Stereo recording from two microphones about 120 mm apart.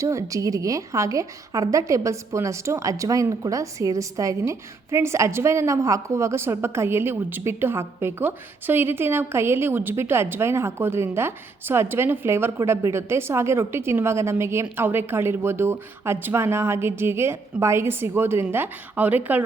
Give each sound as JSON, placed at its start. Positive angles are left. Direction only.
{"t": 0.0, "sound": "a woman's voice", "side_deg": -25}